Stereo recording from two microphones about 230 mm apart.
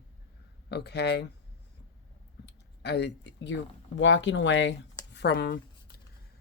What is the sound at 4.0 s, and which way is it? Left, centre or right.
Speech, left.